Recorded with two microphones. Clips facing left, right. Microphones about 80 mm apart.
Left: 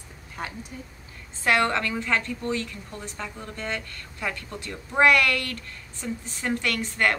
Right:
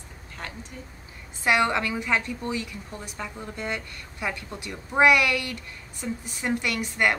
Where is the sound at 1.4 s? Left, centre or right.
Centre.